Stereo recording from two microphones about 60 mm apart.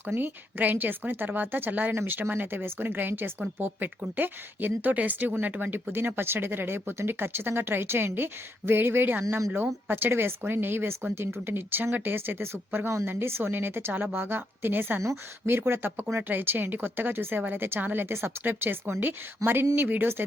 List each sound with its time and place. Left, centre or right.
0.2 s speech: right
19.4 s speech: right
19.7 s speech: right